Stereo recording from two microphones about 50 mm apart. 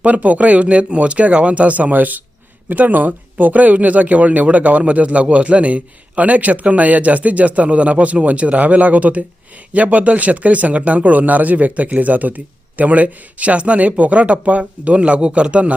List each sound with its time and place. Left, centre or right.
0.0 s a man's voice: right